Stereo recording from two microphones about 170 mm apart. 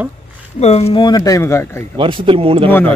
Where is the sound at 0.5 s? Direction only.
40° left (ahead or behind); by 1.8 s 15° left (ahead or behind).